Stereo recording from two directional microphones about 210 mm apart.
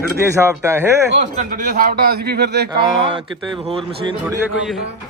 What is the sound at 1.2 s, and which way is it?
A man's voice, 35° right (ahead or behind).